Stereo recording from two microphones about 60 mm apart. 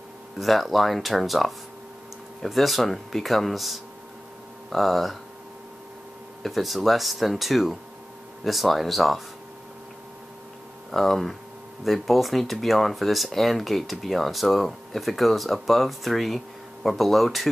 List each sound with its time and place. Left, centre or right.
0.4 s speech: centre
6.4 s speech: centre
10.9 s speech: centre